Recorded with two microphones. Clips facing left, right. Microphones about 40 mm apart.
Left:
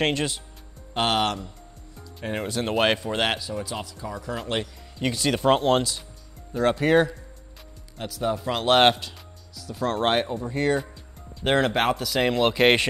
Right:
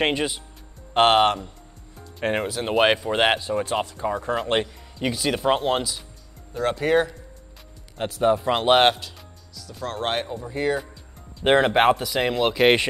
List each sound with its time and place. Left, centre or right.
0.0 s speech: centre
0.9 s speech: right
2.4 s speech: centre; by 4.7 s right
4.9 s speech: centre
8.0 s speech: right
8.7 s speech: centre
11.4 s speech: centre
12.2 s speech: centre